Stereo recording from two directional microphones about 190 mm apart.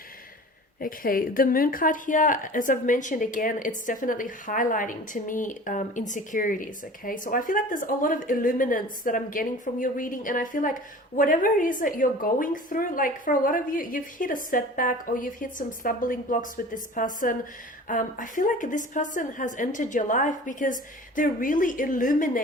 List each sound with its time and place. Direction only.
0.8 s speech: 50° left (ahead or behind)